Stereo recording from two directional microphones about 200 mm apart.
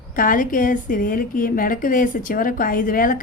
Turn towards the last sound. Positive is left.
turn(degrees=45)  # may be behind; listen again after turning